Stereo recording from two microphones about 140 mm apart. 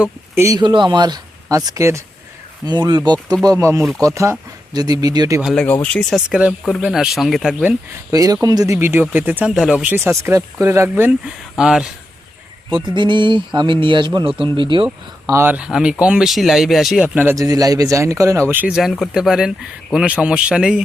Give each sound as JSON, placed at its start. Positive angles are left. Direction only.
{"t": 0.3, "sound": "speech", "side_deg": -20}
{"t": 0.6, "sound": "speech", "side_deg": -35}
{"t": 2.6, "sound": "speech", "side_deg": -30}
{"t": 5.5, "sound": "speech", "side_deg": 10}
{"t": 8.1, "sound": "speech", "side_deg": -25}
{"t": 10.0, "sound": "speech", "side_deg": -20}
{"t": 11.5, "sound": "speech", "side_deg": -5}
{"t": 12.9, "sound": "speech", "side_deg": -35}
{"t": 14.8, "sound": "speech", "side_deg": -15}
{"t": 17.2, "sound": "speech", "side_deg": -25}
{"t": 18.8, "sound": "speech", "side_deg": 0}